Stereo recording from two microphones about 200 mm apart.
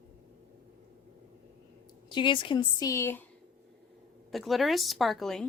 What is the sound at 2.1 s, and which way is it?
Speech, 25° left (ahead or behind).